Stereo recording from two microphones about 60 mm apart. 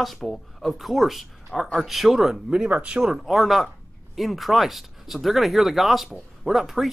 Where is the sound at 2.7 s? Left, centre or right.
Centre.